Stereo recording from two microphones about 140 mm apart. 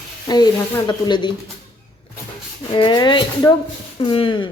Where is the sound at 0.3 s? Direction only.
30° left (ahead or behind).